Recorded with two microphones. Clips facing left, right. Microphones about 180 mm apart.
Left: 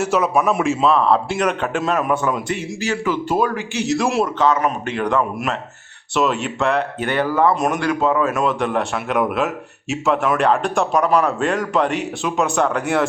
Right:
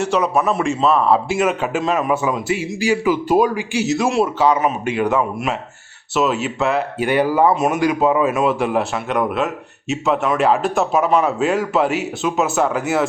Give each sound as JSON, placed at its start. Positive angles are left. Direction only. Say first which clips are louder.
{"t": 0.0, "sound": "speech", "louder": "even", "side_deg": 5}
{"t": 3.8, "sound": "speech", "louder": "right 1 dB", "side_deg": 0}